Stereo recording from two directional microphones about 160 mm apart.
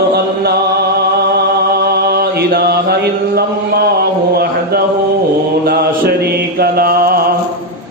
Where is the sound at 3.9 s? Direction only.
80° right.